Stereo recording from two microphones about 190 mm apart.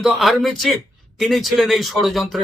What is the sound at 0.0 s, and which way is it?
A man's voice, centre (ahead or behind).